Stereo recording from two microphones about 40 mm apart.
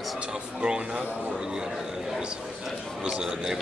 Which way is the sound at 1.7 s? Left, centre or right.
Centre.